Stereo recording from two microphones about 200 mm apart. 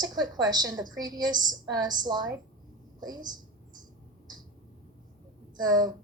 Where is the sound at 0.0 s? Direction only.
20° right (ahead or behind).